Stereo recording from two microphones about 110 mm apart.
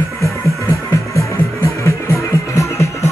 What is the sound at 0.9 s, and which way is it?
Music, 25° left (ahead or behind).